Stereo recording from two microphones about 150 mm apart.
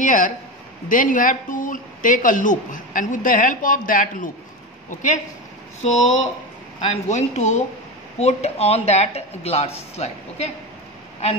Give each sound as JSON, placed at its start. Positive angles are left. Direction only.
{"t": 0.0, "sound": "a woman's voice", "side_deg": 60}
{"t": 5.8, "sound": "speech", "side_deg": 50}